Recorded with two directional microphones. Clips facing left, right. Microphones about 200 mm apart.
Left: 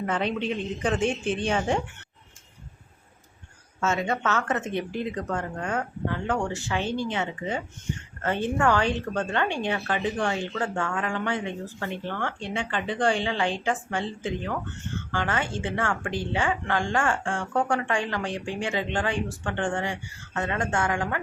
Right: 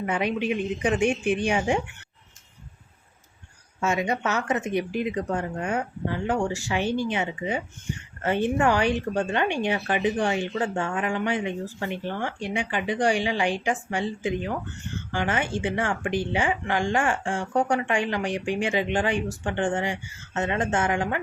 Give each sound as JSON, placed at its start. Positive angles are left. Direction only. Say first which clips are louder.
{"t": 0.0, "sound": "a woman's voice", "louder": "right 1 dB", "side_deg": -10}
{"t": 3.8, "sound": "a woman's voice", "louder": "right 1 dB", "side_deg": -15}